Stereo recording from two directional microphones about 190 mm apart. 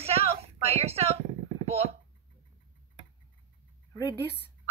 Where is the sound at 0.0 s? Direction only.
30° right (ahead or behind).